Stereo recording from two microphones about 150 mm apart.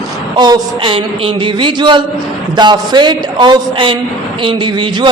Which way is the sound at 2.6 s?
30° right (ahead or behind).